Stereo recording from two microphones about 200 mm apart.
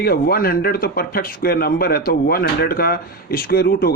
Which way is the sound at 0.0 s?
50° left (ahead or behind).